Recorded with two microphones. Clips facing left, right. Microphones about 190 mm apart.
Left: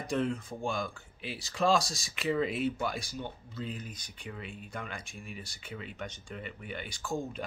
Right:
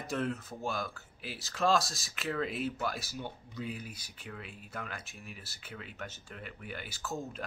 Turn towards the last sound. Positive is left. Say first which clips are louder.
# left 4 dB
turn(degrees=0)  # may be behind; listen again after turning